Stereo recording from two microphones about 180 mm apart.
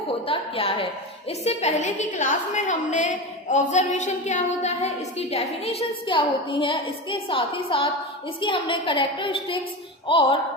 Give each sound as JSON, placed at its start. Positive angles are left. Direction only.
{"t": 0.3, "sound": "a woman's voice", "side_deg": 30}